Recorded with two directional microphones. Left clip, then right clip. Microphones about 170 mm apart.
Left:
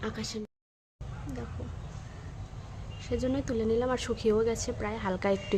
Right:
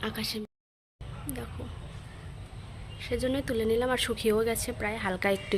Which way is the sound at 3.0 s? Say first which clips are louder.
Right 1 dB; 15° left (ahead or behind).